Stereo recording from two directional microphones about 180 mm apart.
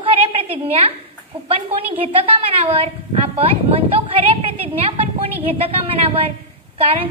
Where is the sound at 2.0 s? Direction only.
30° right (ahead or behind).